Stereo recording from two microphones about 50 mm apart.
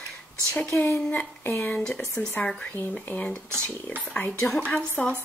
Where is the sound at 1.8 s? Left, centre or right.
Centre.